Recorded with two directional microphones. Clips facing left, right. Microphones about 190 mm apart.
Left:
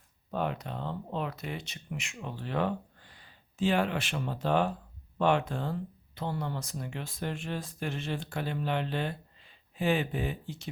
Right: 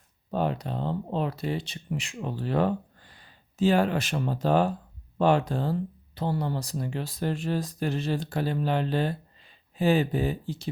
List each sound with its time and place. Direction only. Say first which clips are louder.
0.3 s speech: right 5 dB; 35° right (ahead or behind)